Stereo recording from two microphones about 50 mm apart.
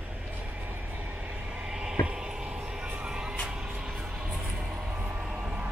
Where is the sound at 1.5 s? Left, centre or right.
Centre.